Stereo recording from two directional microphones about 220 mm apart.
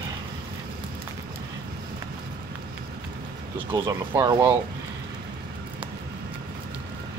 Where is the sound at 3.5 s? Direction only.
20° right (ahead or behind).